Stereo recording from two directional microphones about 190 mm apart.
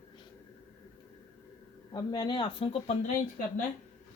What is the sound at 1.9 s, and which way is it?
Speech, 20° left (ahead or behind).